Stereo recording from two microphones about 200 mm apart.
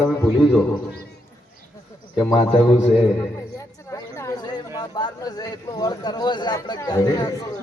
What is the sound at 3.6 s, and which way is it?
A woman's voice, 15° left (ahead or behind).